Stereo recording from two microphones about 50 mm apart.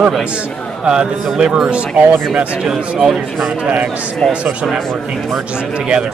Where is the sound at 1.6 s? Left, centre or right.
Right.